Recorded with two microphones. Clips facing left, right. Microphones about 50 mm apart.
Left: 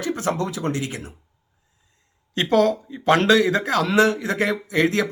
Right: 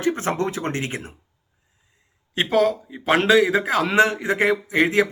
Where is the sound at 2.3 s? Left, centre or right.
Centre.